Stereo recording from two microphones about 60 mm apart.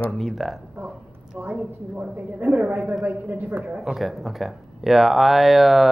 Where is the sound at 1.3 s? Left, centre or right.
Right.